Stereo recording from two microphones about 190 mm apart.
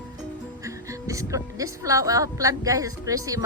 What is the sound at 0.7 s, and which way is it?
A woman's voice, 15° right (ahead or behind).